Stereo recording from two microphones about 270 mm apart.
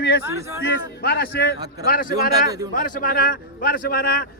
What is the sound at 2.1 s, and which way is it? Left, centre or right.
Speech, centre.